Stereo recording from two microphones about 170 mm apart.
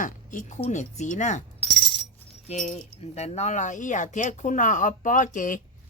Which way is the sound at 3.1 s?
40° left (ahead or behind).